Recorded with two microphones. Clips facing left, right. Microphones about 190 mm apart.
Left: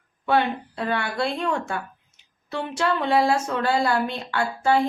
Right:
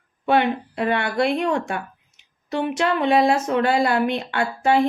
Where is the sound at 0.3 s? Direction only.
20° right (ahead or behind).